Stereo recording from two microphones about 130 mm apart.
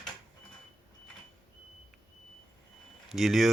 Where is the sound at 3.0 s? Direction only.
Centre (ahead or behind).